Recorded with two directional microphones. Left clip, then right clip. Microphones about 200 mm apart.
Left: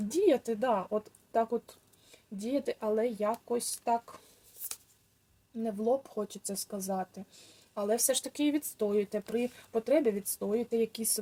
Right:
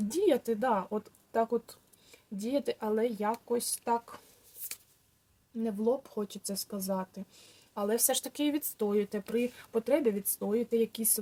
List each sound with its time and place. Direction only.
0.1 s speech: 20° right (ahead or behind)
5.6 s speech: 15° right (ahead or behind)